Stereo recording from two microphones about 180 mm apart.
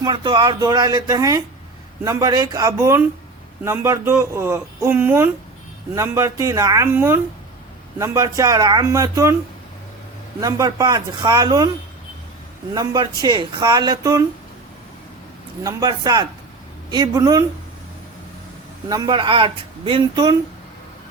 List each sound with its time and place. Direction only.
0.0 s speech: 25° right (ahead or behind)
10.4 s speech: 20° right (ahead or behind)
12.7 s speech: 20° right (ahead or behind)
15.6 s speech: 20° right (ahead or behind)
18.9 s speech: 25° right (ahead or behind)